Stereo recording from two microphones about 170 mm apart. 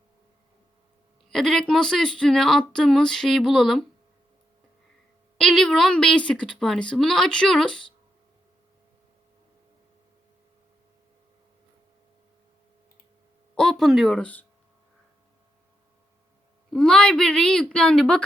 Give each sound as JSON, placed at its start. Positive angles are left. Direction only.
{"t": 1.3, "sound": "speech", "side_deg": 0}
{"t": 5.4, "sound": "speech", "side_deg": 0}
{"t": 13.6, "sound": "speech", "side_deg": 0}
{"t": 16.7, "sound": "speech", "side_deg": 5}